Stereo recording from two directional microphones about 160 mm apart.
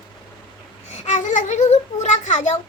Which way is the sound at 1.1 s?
50° left (ahead or behind).